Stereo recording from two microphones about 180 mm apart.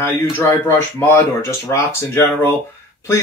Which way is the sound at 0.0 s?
15° left (ahead or behind).